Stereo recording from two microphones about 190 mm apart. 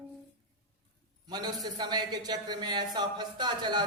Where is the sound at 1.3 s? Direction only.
20° right (ahead or behind).